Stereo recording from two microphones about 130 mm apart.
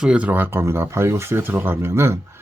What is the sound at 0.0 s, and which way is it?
Speech, 10° right (ahead or behind).